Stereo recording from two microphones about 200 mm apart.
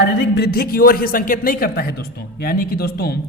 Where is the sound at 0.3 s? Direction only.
50° left (ahead or behind).